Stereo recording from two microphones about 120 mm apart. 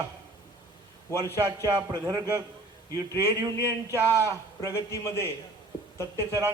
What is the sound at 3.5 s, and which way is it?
A man's voice, 20° left (ahead or behind).